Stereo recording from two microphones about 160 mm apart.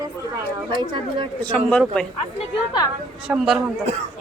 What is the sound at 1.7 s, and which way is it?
Speech, 5° left (ahead or behind).